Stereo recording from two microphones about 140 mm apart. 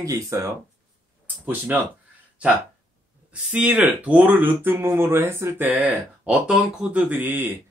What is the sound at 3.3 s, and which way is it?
Speech, 10° right (ahead or behind).